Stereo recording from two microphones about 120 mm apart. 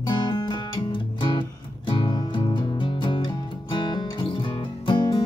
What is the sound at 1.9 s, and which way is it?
Music, 40° left (ahead or behind).